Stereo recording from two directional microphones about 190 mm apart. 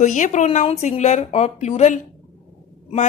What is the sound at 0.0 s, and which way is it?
Speech, 40° left (ahead or behind).